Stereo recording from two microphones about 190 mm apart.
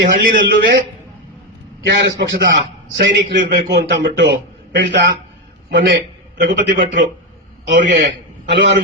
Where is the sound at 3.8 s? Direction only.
65° right (ahead or behind).